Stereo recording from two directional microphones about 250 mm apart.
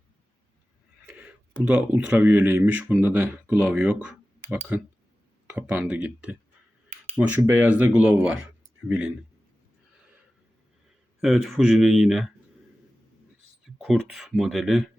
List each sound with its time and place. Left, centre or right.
1.1 s a sound: centre
1.6 s speech: centre
11.2 s speech: centre
13.7 s speech: centre